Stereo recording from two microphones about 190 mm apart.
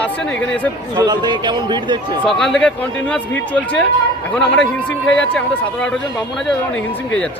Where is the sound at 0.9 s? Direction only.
20° right (ahead or behind).